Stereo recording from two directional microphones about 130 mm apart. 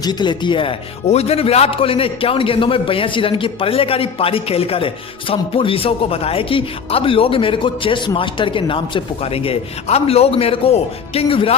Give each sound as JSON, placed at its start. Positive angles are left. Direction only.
{"t": 0.0, "sound": "speech", "side_deg": 35}